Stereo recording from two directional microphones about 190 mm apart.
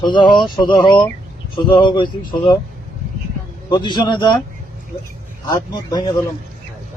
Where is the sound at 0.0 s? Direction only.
25° left (ahead or behind).